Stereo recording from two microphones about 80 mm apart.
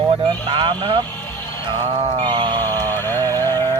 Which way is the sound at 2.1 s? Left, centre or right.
Right.